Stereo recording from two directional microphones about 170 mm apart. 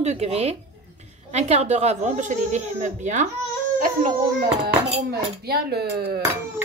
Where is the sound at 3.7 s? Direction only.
55° right (ahead or behind).